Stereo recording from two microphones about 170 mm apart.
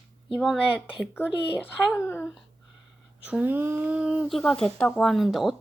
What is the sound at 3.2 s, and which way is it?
Speech, 10° right (ahead or behind).